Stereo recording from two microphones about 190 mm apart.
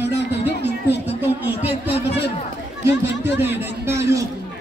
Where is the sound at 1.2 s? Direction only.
10° right (ahead or behind).